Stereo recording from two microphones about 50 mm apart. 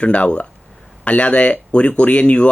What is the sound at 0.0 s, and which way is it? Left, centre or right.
Speech, left.